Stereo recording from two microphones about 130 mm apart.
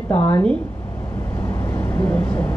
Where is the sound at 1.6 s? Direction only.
20° left (ahead or behind).